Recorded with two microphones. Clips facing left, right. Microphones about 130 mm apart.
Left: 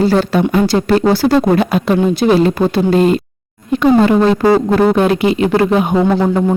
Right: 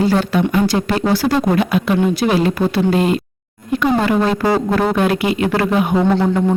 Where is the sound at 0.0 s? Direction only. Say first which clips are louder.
Left 3 dB; 35° left (ahead or behind).